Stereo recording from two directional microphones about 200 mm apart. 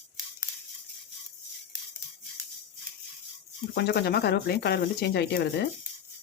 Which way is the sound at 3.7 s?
55° left (ahead or behind).